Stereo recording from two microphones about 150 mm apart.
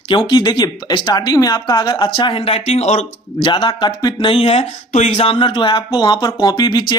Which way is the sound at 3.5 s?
30° left (ahead or behind).